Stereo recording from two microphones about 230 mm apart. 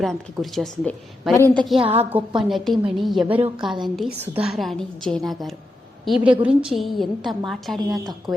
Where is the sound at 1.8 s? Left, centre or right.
Right.